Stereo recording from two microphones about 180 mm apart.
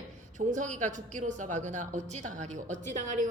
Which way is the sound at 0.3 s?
45° right (ahead or behind).